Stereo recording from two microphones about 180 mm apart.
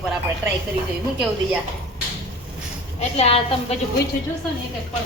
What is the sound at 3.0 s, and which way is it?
Speech, 35° left (ahead or behind).